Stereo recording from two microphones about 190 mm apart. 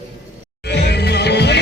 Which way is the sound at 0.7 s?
60° left (ahead or behind).